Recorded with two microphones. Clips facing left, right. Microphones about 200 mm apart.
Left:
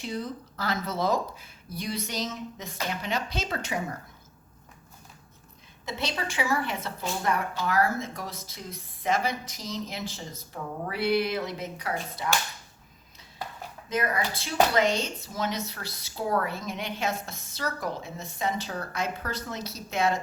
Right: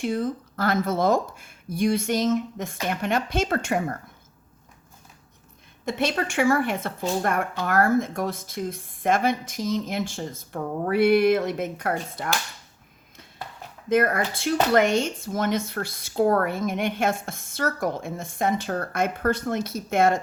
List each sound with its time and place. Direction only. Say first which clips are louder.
0.0 s a woman's voice: right 8 dB; 50° right (ahead or behind)
5.8 s a woman's voice: right 7 dB; 55° right (ahead or behind)
13.9 s a woman's voice: right 7 dB; 50° right (ahead or behind)